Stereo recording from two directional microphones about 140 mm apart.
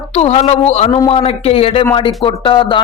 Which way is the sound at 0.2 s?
50° left (ahead or behind).